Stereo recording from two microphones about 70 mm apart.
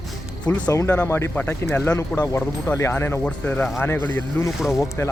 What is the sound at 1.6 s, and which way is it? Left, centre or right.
Speech, left.